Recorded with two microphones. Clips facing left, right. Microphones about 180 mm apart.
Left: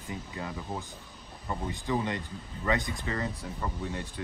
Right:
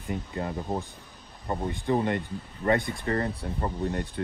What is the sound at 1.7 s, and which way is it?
Speech, 55° right (ahead or behind).